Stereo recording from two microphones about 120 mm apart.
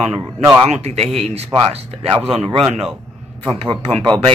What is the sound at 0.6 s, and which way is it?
Speech, 65° right (ahead or behind).